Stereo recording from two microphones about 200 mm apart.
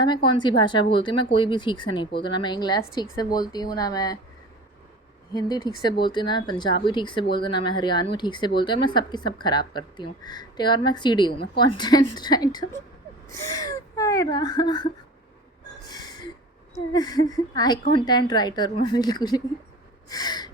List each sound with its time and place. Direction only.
0.0 s speech: 25° left (ahead or behind)
5.3 s speech: 20° left (ahead or behind)
15.8 s gasp: 20° left (ahead or behind)
16.7 s speech: 20° left (ahead or behind)
20.1 s gasp: 20° left (ahead or behind)